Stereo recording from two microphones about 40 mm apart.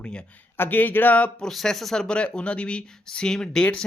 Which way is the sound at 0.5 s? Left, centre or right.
Left.